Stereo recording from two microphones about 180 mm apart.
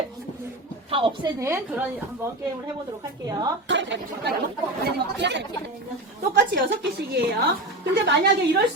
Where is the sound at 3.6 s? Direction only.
90° right.